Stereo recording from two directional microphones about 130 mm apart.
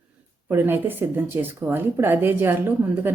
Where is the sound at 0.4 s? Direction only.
15° right (ahead or behind).